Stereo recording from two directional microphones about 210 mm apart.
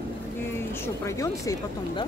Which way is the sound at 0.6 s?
15° left (ahead or behind).